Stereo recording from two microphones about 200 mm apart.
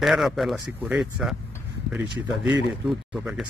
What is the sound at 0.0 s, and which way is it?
Speech, centre (ahead or behind).